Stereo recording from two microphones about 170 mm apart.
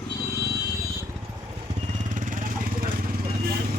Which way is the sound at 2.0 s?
50° right (ahead or behind).